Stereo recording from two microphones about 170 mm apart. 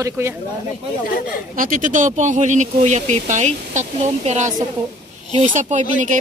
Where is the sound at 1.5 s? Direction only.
55° right (ahead or behind).